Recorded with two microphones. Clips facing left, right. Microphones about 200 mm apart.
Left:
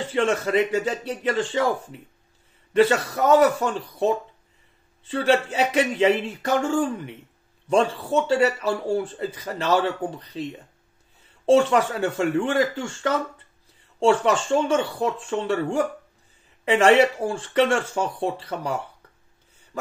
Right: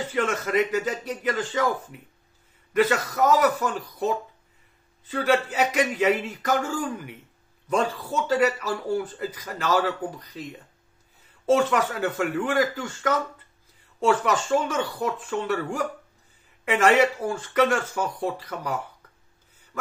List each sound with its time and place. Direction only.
0.0 s speech: 30° left (ahead or behind)
11.5 s speech: 30° left (ahead or behind)